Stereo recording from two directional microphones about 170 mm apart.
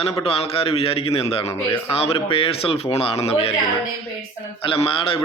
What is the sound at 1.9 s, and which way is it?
Speech, 35° left (ahead or behind).